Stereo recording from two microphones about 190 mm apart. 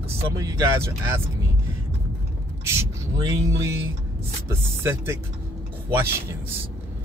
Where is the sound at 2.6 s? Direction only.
15° right (ahead or behind).